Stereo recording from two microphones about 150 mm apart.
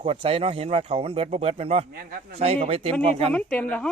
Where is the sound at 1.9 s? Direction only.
80° right.